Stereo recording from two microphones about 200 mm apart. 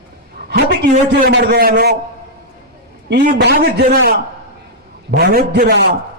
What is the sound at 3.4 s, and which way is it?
A man's voice, 55° right (ahead or behind).